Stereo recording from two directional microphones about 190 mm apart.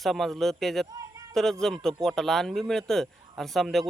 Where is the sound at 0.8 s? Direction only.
15° right (ahead or behind).